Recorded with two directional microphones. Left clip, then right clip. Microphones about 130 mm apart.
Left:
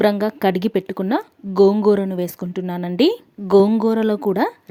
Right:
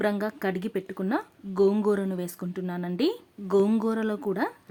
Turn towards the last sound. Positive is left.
turn(degrees=45)  # may be behind; listen again after turning